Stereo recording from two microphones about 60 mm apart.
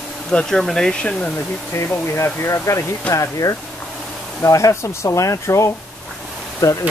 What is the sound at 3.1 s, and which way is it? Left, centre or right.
Speech, left.